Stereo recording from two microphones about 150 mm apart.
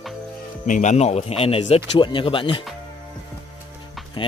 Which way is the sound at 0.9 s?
45° left (ahead or behind).